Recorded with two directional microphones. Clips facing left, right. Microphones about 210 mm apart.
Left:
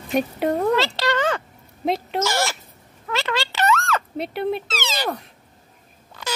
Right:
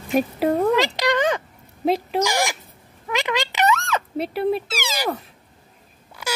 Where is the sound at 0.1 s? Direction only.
5° right (ahead or behind).